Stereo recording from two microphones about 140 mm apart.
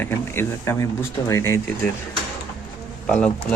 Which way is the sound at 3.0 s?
10° left (ahead or behind).